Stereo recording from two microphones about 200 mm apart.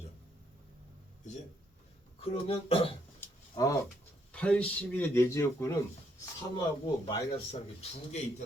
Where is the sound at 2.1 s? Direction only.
30° left (ahead or behind).